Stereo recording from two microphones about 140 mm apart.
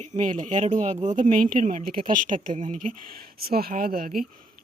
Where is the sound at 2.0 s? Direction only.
70° right (ahead or behind).